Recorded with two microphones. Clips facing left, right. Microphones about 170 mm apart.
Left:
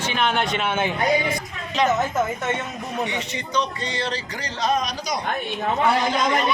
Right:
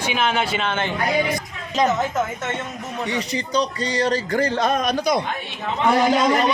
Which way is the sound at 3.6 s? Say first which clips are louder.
Right 4 dB; 40° right (ahead or behind).